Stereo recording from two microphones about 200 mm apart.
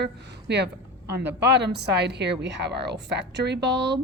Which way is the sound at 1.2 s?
60° right (ahead or behind).